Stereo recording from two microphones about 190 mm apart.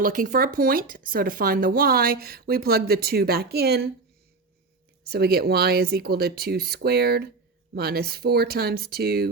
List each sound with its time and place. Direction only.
0.0 s speech: 45° right (ahead or behind)
5.0 s speech: 55° right (ahead or behind)